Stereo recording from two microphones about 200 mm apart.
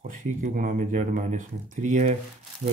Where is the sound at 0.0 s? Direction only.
40° right (ahead or behind).